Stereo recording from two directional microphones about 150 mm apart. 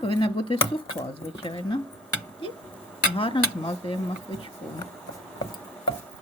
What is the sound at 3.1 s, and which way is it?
Speech, 35° left (ahead or behind).